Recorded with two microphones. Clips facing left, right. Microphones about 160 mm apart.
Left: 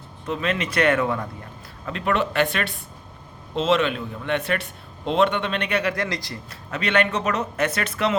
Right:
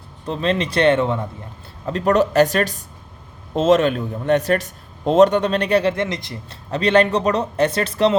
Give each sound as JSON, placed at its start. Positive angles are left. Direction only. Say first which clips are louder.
{"t": 0.3, "sound": "a man's voice", "louder": "right 4 dB", "side_deg": -35}
{"t": 1.8, "sound": "a man's voice", "louder": "right 7 dB", "side_deg": -35}
{"t": 6.7, "sound": "a man's voice", "louder": "right 6 dB", "side_deg": -35}